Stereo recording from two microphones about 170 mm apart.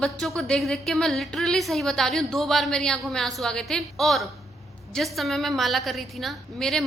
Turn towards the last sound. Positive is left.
turn(degrees=0)  # may be behind; listen again after turning